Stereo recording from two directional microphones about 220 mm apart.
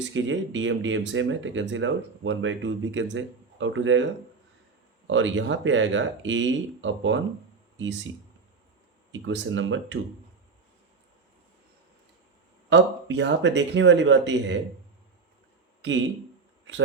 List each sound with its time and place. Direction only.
0.1 s speech: 60° right (ahead or behind)
5.0 s speech: 60° right (ahead or behind)
9.1 s speech: 60° right (ahead or behind)
12.7 s speech: 50° right (ahead or behind)
15.8 s speech: 55° right (ahead or behind)